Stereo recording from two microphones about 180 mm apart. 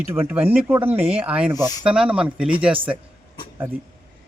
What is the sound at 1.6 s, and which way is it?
Speech, 20° left (ahead or behind).